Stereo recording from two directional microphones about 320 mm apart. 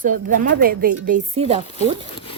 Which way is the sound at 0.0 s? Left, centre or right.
Right.